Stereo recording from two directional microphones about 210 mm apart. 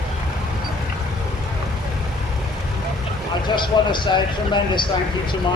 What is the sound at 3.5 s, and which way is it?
Speech, 20° left (ahead or behind).